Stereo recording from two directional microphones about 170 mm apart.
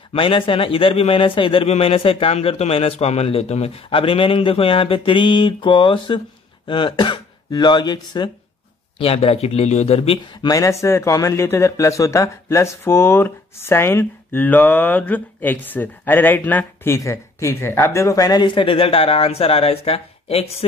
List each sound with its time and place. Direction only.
0.1 s a man's voice: 30° left (ahead or behind)
10.5 s speech: 20° left (ahead or behind); by 20.5 s 35° left (ahead or behind)